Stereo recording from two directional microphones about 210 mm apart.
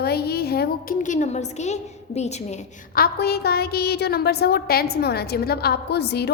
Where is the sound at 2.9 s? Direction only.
45° left (ahead or behind).